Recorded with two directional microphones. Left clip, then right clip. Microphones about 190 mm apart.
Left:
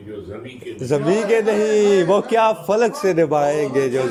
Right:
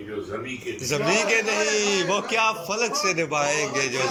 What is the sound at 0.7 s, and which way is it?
A man's voice, 40° left (ahead or behind).